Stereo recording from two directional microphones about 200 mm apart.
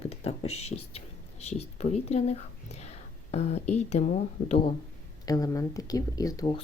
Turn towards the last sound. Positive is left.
turn(degrees=20)  # may be behind; listen again after turning